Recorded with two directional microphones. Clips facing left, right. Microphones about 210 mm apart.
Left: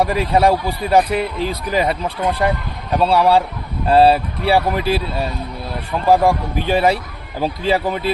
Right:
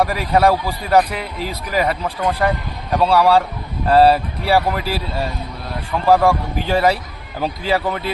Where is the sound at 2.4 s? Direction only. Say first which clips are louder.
Even; 20° left (ahead or behind).